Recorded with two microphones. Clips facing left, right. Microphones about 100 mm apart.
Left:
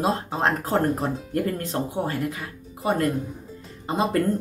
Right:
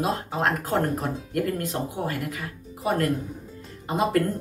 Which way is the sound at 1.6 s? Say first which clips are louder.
Left 2 dB; 30° left (ahead or behind).